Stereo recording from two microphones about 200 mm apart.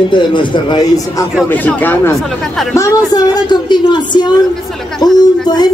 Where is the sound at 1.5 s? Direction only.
10° left (ahead or behind).